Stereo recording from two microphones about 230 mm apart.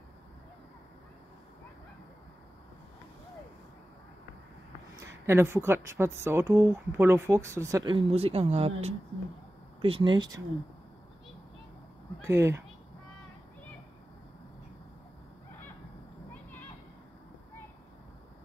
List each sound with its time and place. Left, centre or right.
5.0 s a woman's voice: centre
12.3 s speech: centre